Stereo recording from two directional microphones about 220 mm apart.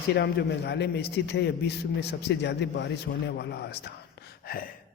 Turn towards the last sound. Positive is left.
turn(degrees=50)  # may be behind; listen again after turning